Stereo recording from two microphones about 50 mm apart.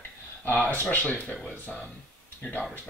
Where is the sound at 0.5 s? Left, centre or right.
Left.